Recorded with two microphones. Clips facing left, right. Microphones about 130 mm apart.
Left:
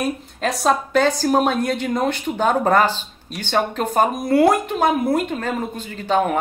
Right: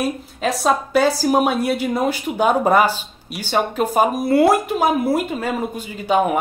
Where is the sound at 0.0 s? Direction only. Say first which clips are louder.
Right 1 dB; centre (ahead or behind).